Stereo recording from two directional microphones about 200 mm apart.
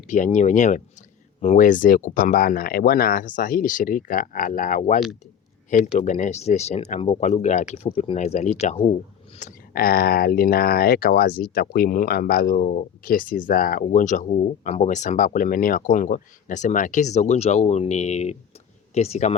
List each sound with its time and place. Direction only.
0.1 s speech: 35° left (ahead or behind)
9.4 s speech: 50° left (ahead or behind); by 19.4 s 30° left (ahead or behind)